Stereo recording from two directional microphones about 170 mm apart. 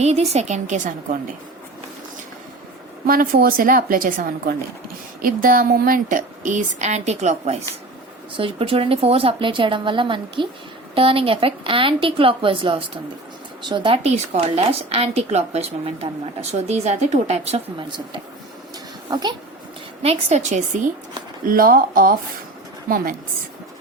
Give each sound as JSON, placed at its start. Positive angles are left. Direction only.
{"t": 0.0, "sound": "a woman's voice", "side_deg": -40}
{"t": 3.1, "sound": "a woman's voice", "side_deg": -55}
{"t": 20.0, "sound": "a woman's voice", "side_deg": -40}